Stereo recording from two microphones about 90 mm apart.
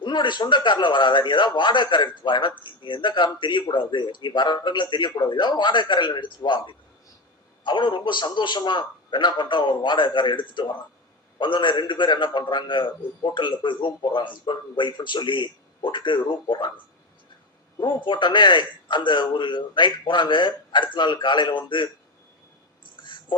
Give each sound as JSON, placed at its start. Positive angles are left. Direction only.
{"t": 0.0, "sound": "a man's voice", "side_deg": 60}
{"t": 17.7, "sound": "a man's voice", "side_deg": 65}
{"t": 23.0, "sound": "a sound", "side_deg": 60}